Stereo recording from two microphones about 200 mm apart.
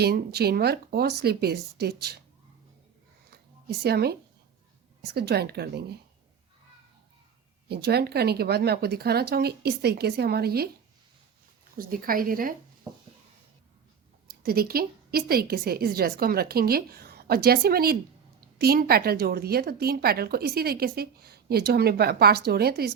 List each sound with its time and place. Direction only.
0.0 s a woman's voice: 50° right (ahead or behind)
3.2 s a sound: 50° right (ahead or behind)
5.0 s a woman's voice: 55° right (ahead or behind)
7.7 s a woman's voice: 55° right (ahead or behind)
11.8 s a woman's voice: 45° right (ahead or behind)
14.3 s a woman's voice: 50° right (ahead or behind)